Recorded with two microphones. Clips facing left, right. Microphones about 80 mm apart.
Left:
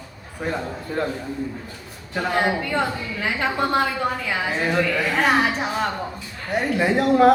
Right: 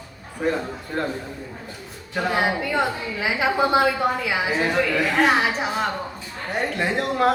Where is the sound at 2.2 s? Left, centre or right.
Centre.